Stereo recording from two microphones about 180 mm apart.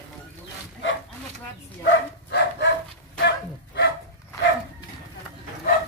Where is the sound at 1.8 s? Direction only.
75° left (ahead or behind).